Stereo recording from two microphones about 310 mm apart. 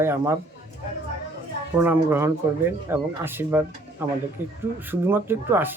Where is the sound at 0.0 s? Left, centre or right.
Centre.